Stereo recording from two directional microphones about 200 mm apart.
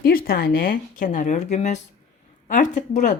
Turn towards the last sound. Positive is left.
turn(degrees=40)  # may be behind; listen again after turning